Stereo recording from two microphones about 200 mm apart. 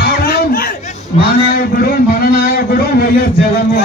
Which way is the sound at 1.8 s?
50° left (ahead or behind).